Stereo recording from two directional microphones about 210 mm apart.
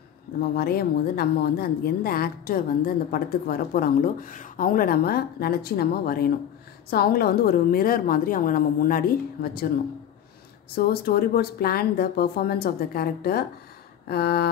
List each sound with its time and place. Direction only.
0.4 s a woman's voice: 45° left (ahead or behind)
10.8 s a woman's voice: 50° left (ahead or behind)